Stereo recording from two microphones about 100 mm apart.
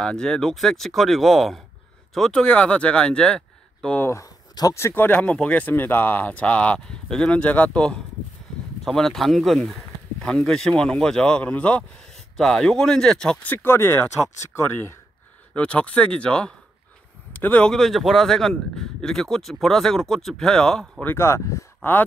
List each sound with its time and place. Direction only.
0.0 s speech: 5° left (ahead or behind)
4.0 s speech: 30° left (ahead or behind)
15.5 s speech: 10° left (ahead or behind)
21.0 s speech: 25° left (ahead or behind)